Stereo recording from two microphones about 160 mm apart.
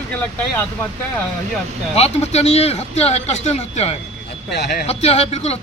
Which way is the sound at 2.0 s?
40° left (ahead or behind).